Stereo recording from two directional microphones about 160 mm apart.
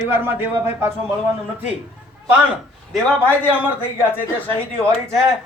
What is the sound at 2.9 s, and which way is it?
Speech, 10° left (ahead or behind).